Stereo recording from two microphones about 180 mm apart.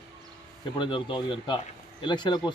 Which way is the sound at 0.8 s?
25° left (ahead or behind).